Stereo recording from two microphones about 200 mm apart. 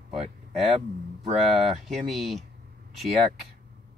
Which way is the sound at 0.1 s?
Centre (ahead or behind).